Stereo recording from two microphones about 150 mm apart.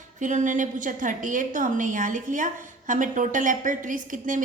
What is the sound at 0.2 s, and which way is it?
A woman's voice, 55° right (ahead or behind).